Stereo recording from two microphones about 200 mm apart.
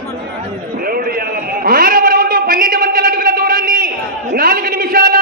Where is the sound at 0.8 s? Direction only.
50° right (ahead or behind).